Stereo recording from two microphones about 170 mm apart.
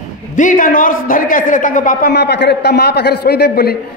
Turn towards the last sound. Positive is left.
turn(degrees=70)  # may be behind; listen again after turning